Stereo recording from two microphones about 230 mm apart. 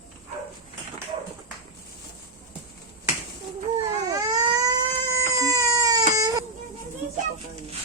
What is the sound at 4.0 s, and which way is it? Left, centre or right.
Cat, centre.